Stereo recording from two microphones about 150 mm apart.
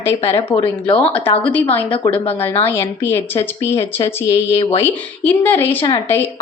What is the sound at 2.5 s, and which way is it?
Speech, 15° left (ahead or behind).